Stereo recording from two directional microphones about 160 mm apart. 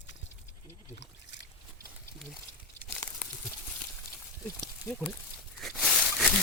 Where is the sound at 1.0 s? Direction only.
90° left.